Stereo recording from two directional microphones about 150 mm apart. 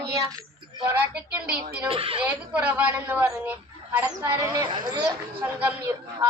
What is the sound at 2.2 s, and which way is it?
A man's voice, 10° right (ahead or behind).